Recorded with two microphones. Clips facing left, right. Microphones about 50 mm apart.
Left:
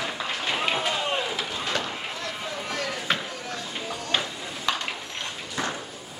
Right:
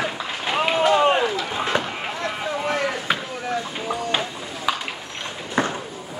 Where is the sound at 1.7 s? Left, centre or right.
Right.